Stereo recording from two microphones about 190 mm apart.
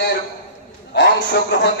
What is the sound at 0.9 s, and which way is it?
Speech, 60° left (ahead or behind).